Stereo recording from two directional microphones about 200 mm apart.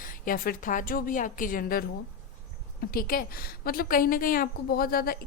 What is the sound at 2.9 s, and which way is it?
A woman's voice, 45° left (ahead or behind).